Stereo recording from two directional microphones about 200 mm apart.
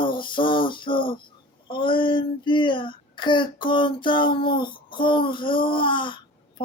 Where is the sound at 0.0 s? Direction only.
25° left (ahead or behind).